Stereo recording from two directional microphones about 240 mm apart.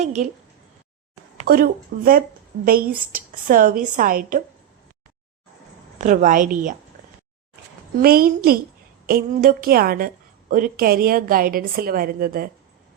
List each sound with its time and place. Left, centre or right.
0.0 s a woman's voice: right
1.5 s a woman's voice: right
6.0 s a woman's voice: right
8.0 s a woman's voice: right